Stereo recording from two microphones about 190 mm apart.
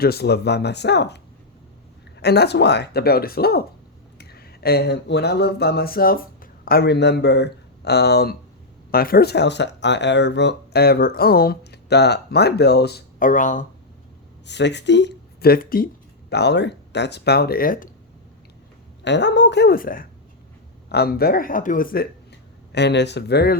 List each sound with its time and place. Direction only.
0.0 s speech: 55° left (ahead or behind)
2.2 s speech: 60° left (ahead or behind); by 13.7 s 40° left (ahead or behind)
14.4 s speech: 65° left (ahead or behind); by 15.9 s 50° left (ahead or behind)
16.3 s speech: 60° left (ahead or behind); by 17.8 s 45° left (ahead or behind)
19.0 s speech: 65° left (ahead or behind)